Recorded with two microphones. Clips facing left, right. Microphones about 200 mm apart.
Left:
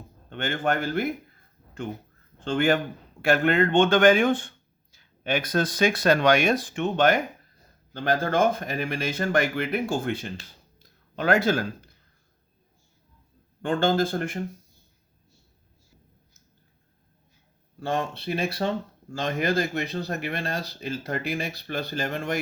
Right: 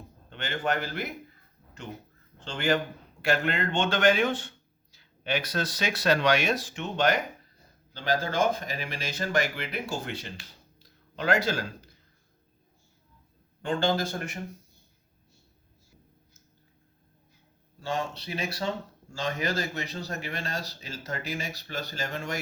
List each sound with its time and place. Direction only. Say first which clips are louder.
0.3 s speech: left 4 dB; 50° left (ahead or behind)
2.4 s a man's voice: left 5 dB; 55° left (ahead or behind)
10.8 s a sound: left 4 dB; 50° left (ahead or behind)
13.6 s speech: left 4 dB; 55° left (ahead or behind)
17.7 s speech: left 4 dB; 55° left (ahead or behind)